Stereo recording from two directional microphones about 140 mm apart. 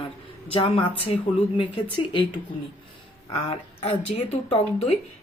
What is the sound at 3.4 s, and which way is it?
Speech, 45° left (ahead or behind).